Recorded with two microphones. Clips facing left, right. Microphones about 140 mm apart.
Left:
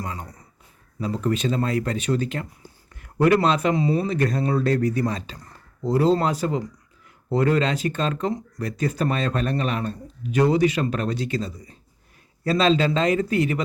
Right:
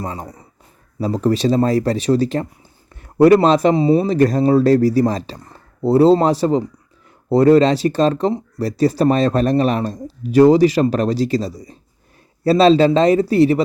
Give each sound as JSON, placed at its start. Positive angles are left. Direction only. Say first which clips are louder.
{"t": 0.0, "sound": "speech", "louder": "right 6 dB", "side_deg": -30}